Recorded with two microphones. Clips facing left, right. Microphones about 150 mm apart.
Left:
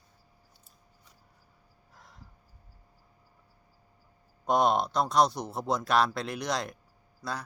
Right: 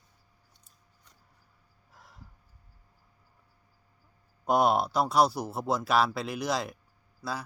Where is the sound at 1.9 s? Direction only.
5° right (ahead or behind).